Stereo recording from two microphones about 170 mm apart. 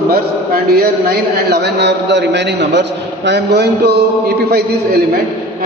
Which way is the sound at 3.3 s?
80° right.